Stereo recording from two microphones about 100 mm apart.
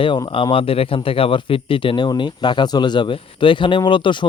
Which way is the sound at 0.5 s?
70° left (ahead or behind).